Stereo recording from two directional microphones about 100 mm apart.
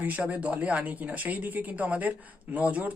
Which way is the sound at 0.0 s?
15° right (ahead or behind).